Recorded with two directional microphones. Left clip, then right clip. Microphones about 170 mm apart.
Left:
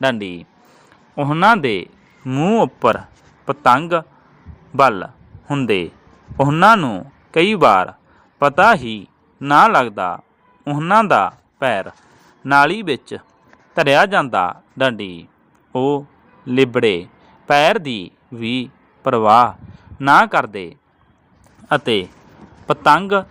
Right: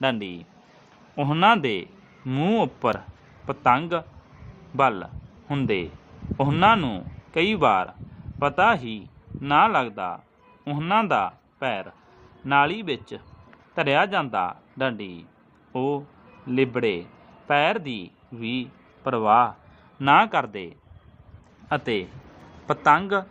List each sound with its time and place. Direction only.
0.0 s speech: 25° left (ahead or behind)
1.1 s a man's voice: 15° left (ahead or behind)
1.6 s a man's voice: 30° left (ahead or behind)
2.7 s a man's voice: 35° left (ahead or behind)